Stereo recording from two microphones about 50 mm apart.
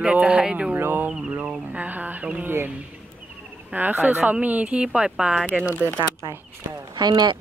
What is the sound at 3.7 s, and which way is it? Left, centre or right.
Speech, right.